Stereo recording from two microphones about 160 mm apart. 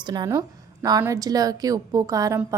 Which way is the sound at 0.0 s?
25° right (ahead or behind).